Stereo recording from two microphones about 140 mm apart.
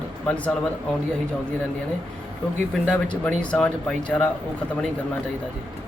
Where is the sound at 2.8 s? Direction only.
10° left (ahead or behind).